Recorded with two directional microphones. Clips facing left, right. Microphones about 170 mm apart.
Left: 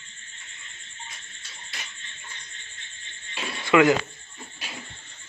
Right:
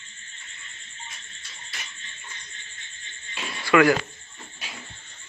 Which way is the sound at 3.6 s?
20° left (ahead or behind).